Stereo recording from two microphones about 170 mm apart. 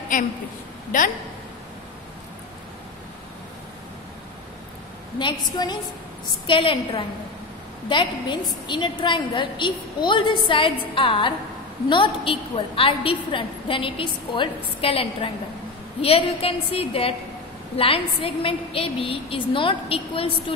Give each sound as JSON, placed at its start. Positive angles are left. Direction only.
{"t": 0.1, "sound": "a woman's voice", "side_deg": 50}
{"t": 5.2, "sound": "a woman's voice", "side_deg": 25}